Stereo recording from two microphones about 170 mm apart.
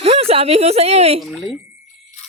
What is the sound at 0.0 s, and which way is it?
Speech, 35° right (ahead or behind).